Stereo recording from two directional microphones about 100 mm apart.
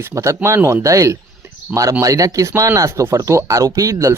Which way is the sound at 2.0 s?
35° right (ahead or behind).